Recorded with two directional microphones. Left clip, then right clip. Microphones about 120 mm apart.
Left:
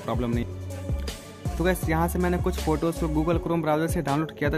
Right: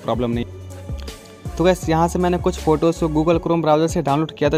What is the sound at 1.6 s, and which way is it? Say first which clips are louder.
Speech: right 9 dB; 45° right (ahead or behind).